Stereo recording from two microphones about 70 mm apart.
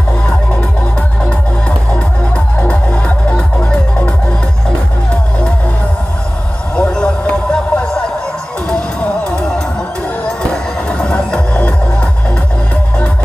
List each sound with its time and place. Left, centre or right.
1.9 s music: centre
6.7 s a sound: centre
10.5 s music: centre